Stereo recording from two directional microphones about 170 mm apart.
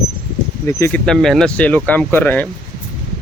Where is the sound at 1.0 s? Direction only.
5° left (ahead or behind).